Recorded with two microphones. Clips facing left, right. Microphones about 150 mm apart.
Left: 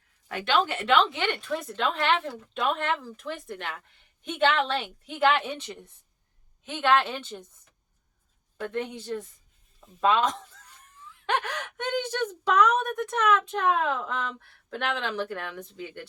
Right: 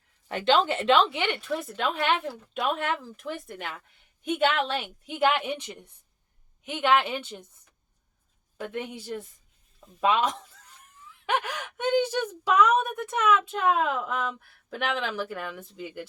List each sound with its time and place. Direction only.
0.3 s a woman's voice: 25° right (ahead or behind)
8.5 s speech: 10° right (ahead or behind)